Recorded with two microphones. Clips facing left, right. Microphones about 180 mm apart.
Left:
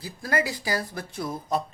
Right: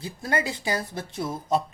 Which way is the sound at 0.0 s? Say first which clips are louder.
Even; 25° right (ahead or behind).